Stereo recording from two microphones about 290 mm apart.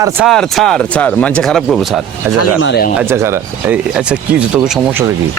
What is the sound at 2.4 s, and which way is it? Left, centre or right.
Speech, left.